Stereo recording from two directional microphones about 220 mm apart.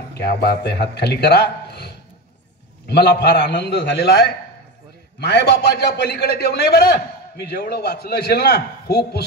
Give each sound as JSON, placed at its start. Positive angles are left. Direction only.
{"t": 0.1, "sound": "a man's voice", "side_deg": 45}